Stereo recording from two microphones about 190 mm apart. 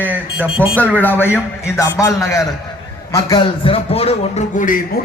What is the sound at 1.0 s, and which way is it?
A man's voice, 10° left (ahead or behind).